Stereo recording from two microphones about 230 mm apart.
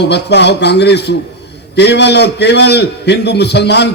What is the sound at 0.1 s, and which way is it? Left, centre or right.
A man's voice, left.